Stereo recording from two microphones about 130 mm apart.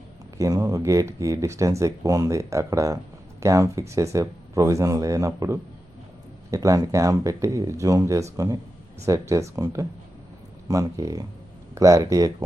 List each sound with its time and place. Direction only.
0.3 s speech: 25° right (ahead or behind)